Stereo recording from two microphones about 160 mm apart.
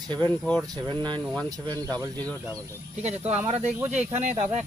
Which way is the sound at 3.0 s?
45° right (ahead or behind).